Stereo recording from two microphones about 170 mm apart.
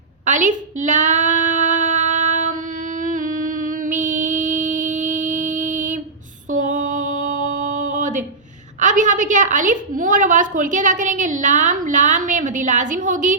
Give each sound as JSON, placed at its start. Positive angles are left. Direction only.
{"t": 0.3, "sound": "child singing", "side_deg": -50}
{"t": 6.5, "sound": "a sound", "side_deg": -50}
{"t": 8.8, "sound": "a woman's voice", "side_deg": -50}